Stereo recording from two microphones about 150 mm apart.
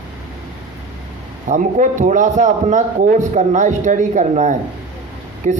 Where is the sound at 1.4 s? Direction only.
55° right (ahead or behind).